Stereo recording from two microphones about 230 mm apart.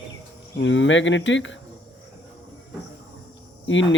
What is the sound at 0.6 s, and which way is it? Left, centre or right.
Speech, left.